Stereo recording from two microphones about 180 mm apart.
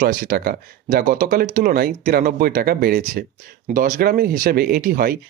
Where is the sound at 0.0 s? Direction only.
55° right (ahead or behind).